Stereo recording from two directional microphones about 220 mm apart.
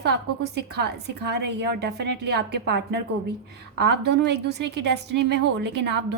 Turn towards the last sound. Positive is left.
turn(degrees=-50)  # may be behind; listen again after turning